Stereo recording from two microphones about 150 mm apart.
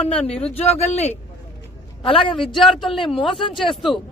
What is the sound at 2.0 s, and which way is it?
Speech, 35° left (ahead or behind).